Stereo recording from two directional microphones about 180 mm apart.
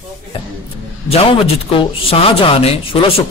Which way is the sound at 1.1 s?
30° left (ahead or behind).